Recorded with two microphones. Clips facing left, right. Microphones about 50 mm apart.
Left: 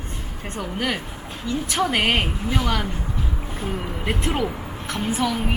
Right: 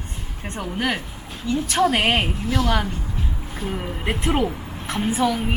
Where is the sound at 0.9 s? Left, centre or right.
Centre.